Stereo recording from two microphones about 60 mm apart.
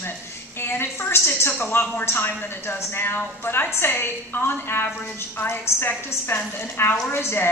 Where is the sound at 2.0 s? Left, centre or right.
Left.